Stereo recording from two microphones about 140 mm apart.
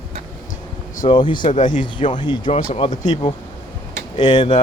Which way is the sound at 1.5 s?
65° left (ahead or behind).